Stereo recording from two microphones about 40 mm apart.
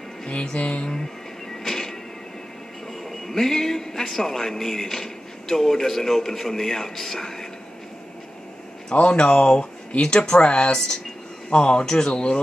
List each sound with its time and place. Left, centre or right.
0.3 s music: left
1.6 s music: centre
3.1 s a man's voice: centre
8.9 s music: left
9.2 s speech: left